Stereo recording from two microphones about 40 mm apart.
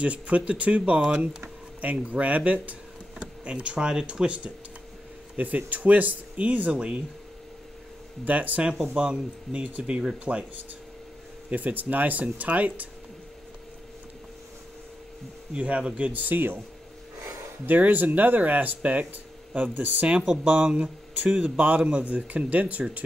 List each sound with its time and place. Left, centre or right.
0.0 s speech: right
5.3 s speech: right
6.7 s speech: right
8.3 s speech: right
8.9 s speech: right
10.3 s speech: right
11.5 s speech: right
15.5 s speech: right
16.0 s speech: right
17.6 s speech: right
20.4 s speech: right